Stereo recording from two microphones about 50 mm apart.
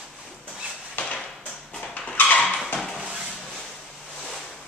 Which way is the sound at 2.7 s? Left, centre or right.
Centre.